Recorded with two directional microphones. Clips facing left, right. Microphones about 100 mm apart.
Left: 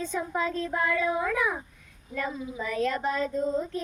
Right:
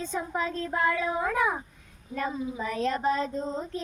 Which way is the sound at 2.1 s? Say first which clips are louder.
Right 1 dB; 30° right (ahead or behind).